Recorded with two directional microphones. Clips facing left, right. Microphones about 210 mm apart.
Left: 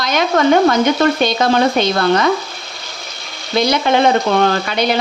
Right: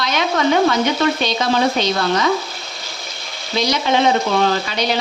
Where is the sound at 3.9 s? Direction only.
55° left (ahead or behind).